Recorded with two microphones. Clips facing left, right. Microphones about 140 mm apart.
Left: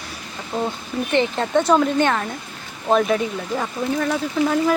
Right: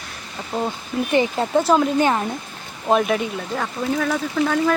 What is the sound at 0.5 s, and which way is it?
Speech, 10° right (ahead or behind).